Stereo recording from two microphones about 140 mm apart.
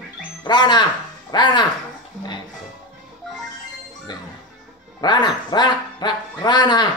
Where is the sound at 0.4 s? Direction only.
30° left (ahead or behind).